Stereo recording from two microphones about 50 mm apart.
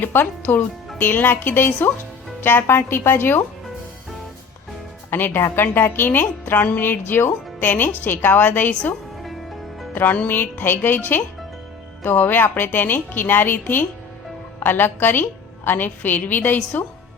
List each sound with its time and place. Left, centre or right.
0.1 s a woman's voice: left
5.1 s a woman's voice: left
9.9 s music: left
10.2 s a woman's voice: left